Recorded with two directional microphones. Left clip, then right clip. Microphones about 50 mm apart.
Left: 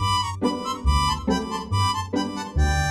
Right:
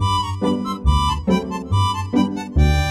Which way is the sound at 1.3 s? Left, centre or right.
Right.